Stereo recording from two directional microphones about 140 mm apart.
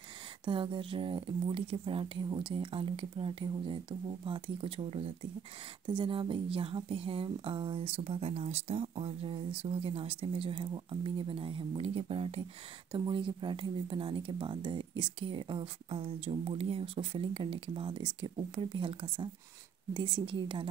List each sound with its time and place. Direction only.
0.5 s speech: 40° right (ahead or behind)